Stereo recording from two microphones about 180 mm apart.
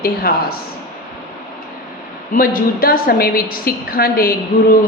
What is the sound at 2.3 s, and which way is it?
A woman's voice, 50° left (ahead or behind).